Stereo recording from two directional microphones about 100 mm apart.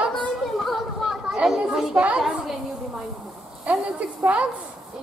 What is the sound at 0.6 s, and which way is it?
Chatter, 5° right (ahead or behind).